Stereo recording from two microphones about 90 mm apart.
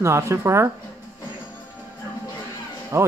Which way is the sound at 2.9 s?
30° right (ahead or behind).